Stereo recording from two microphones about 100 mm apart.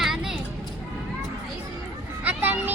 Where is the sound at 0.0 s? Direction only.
5° right (ahead or behind).